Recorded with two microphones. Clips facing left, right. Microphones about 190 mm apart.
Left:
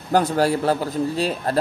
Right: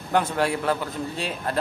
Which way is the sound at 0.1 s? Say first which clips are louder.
Left 5 dB; 35° left (ahead or behind).